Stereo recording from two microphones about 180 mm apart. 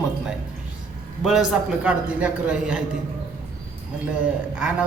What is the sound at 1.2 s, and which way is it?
Speech, 5° right (ahead or behind).